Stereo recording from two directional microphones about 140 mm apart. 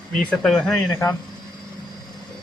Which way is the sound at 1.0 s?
15° left (ahead or behind).